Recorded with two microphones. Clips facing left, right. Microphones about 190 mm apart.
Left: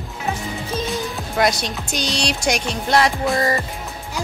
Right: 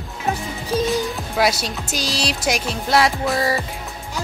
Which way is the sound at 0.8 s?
Centre (ahead or behind).